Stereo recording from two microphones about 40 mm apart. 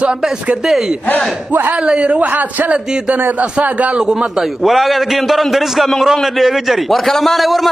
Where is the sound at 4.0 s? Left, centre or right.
Right.